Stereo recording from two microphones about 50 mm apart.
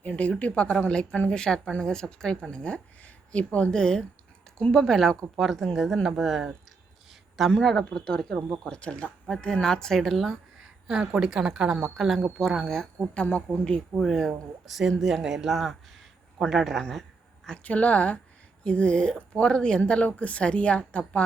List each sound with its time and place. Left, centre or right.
0.0 s a woman's voice: left; by 6.5 s centre
7.1 s a sound: centre
7.6 s a woman's voice: centre
10.8 s a woman's voice: centre
11.8 s speech: centre
13.3 s speech: left
13.9 s speech: centre
16.9 s a sound: centre
17.6 s a woman's voice: left